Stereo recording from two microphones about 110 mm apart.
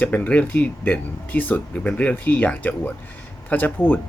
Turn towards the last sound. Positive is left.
turn(degrees=15)  # may be behind; listen again after turning